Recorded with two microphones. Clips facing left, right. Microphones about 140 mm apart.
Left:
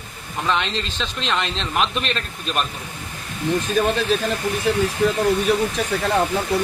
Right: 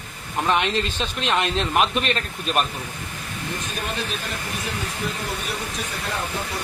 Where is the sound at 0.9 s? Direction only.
10° right (ahead or behind).